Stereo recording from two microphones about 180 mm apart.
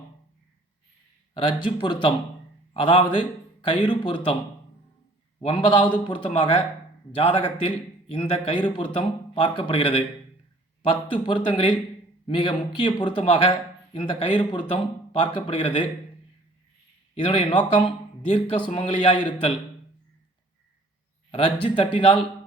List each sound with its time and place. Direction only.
1.3 s speech: 25° left (ahead or behind)
5.4 s speech: 30° left (ahead or behind)
17.2 s speech: 30° left (ahead or behind)
21.2 s speech: 30° left (ahead or behind)